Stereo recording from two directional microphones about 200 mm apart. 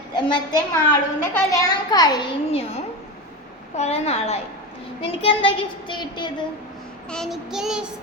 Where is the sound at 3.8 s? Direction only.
30° left (ahead or behind).